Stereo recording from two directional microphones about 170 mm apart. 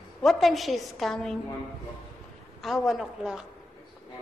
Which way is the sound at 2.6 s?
Centre (ahead or behind).